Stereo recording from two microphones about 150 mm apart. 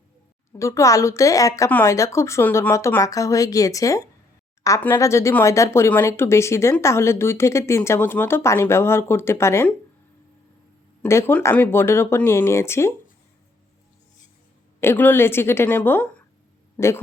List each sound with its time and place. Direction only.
0.6 s speech: 20° left (ahead or behind)
11.0 s speech: 15° left (ahead or behind)
14.8 s speech: 15° left (ahead or behind)